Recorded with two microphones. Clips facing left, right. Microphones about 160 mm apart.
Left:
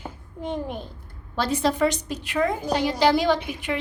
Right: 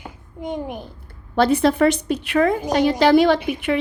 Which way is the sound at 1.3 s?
60° right (ahead or behind).